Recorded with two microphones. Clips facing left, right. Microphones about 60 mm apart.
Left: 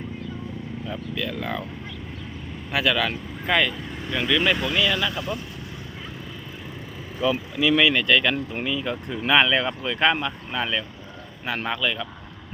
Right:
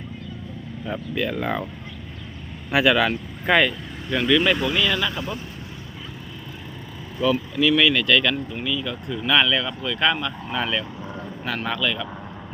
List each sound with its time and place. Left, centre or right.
0.9 s speech: right
2.7 s speech: centre
3.7 s speech: centre
5.1 s speech: right
7.2 s speech: centre
8.5 s speech: left
10.5 s speech: centre
11.4 s speech: centre